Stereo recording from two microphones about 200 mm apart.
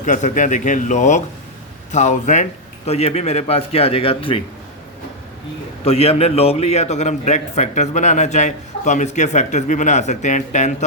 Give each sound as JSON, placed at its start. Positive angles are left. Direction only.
{"t": 0.0, "sound": "a man's voice", "side_deg": 35}
{"t": 5.8, "sound": "a man's voice", "side_deg": 30}